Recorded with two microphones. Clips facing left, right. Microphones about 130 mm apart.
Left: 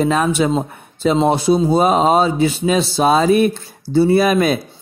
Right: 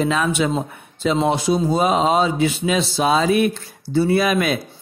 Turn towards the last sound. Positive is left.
turn(degrees=35)  # may be behind; listen again after turning